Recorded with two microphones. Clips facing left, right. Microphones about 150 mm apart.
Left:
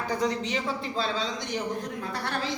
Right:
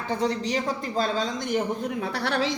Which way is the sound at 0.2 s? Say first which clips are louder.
Right 2 dB; 35° right (ahead or behind).